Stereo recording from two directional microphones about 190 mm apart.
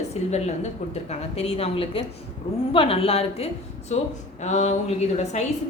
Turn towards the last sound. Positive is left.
turn(degrees=35)  # may be behind; listen again after turning